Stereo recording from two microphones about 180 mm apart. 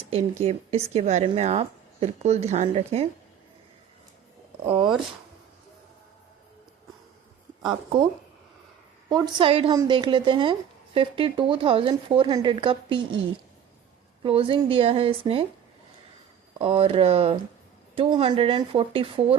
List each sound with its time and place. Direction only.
0.0 s speech: 35° right (ahead or behind)
4.6 s speech: 30° right (ahead or behind)
7.6 s speech: 25° right (ahead or behind)
9.0 s speech: 25° right (ahead or behind)
14.3 s speech: 30° right (ahead or behind)
16.6 s speech: 30° right (ahead or behind)